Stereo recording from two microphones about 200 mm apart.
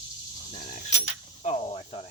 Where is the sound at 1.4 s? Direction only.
35° left (ahead or behind).